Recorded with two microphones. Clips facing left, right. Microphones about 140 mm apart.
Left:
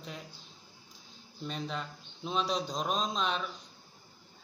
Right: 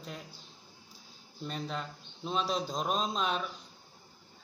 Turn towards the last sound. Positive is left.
turn(degrees=-5)  # may be behind; listen again after turning